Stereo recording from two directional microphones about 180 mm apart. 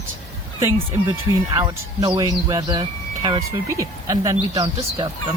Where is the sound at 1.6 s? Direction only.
20° right (ahead or behind).